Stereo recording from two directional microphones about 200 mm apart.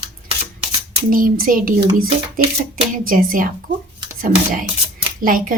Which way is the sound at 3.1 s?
45° right (ahead or behind).